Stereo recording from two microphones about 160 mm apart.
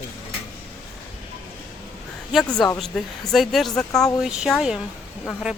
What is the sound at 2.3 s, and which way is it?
Speech, 5° left (ahead or behind).